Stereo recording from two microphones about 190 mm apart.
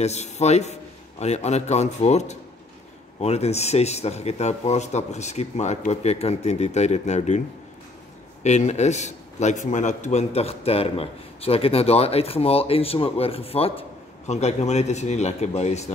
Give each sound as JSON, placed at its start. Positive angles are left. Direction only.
{"t": 0.0, "sound": "a man's voice", "side_deg": 35}